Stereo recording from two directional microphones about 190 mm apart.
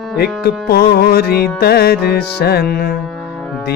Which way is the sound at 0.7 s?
55° left (ahead or behind).